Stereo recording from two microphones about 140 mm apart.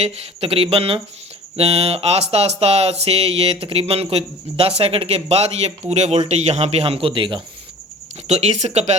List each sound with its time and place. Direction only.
0.0 s speech: 45° right (ahead or behind)
8.3 s speech: 55° right (ahead or behind)